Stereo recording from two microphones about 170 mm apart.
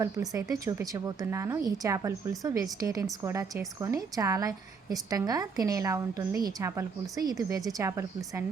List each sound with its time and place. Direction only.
0.0 s a woman's voice: 20° right (ahead or behind)